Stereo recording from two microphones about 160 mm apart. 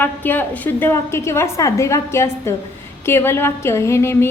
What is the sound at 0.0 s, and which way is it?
A woman's voice, 10° left (ahead or behind).